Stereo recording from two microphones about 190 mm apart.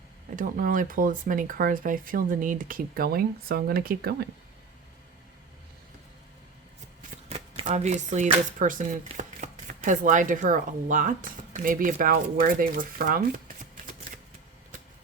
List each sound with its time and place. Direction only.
0.3 s speech: 45° right (ahead or behind)
7.3 s speech: 35° right (ahead or behind)